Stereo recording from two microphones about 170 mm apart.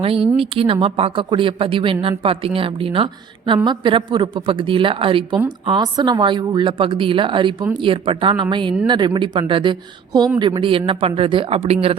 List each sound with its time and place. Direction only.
0.0 s a woman's voice: 35° right (ahead or behind)